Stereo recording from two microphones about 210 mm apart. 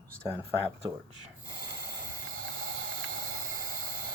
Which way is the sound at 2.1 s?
45° right (ahead or behind).